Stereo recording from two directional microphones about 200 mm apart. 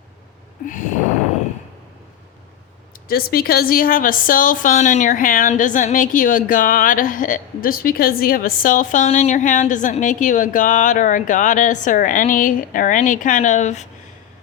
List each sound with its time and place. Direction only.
0.6 s a woman's voice: 40° left (ahead or behind)
3.1 s a woman's voice: 50° left (ahead or behind)